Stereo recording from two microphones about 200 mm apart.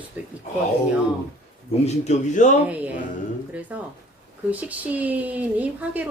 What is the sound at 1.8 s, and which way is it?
Speech, 35° left (ahead or behind).